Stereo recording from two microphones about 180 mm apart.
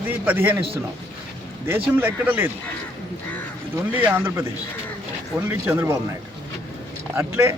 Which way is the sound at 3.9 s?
10° right (ahead or behind).